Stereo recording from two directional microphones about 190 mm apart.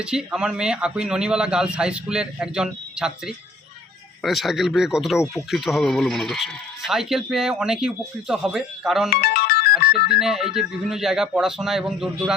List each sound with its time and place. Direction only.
0.0 s speech: 5° right (ahead or behind)
9.2 s ringtone: 55° left (ahead or behind)
10.2 s speech: centre (ahead or behind)